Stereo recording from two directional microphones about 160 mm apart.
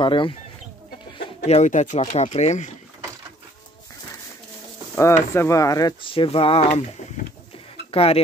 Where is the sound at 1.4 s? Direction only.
45° left (ahead or behind).